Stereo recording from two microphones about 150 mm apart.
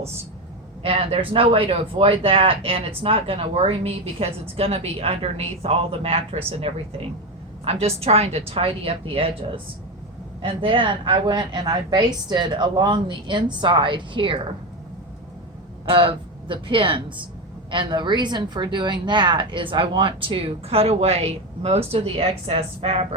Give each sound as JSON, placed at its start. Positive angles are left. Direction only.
{"t": 0.8, "sound": "speech", "side_deg": -40}
{"t": 10.4, "sound": "speech", "side_deg": -35}
{"t": 15.9, "sound": "speech", "side_deg": -35}